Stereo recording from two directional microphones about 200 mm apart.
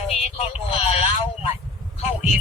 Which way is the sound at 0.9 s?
30° left (ahead or behind).